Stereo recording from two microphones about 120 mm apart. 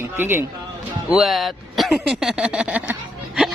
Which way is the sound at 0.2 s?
15° right (ahead or behind).